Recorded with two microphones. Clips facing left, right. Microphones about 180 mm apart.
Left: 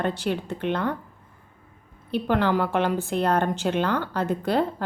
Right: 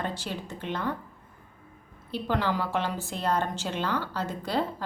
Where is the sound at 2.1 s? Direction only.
55° left (ahead or behind).